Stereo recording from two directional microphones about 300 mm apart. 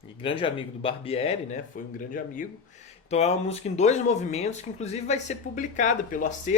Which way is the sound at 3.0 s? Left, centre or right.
Left.